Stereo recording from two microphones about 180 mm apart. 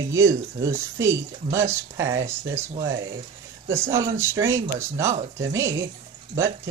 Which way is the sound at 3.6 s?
15° right (ahead or behind).